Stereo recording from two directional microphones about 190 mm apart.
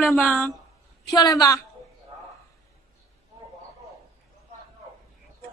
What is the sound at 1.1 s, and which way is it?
Speech, 20° left (ahead or behind).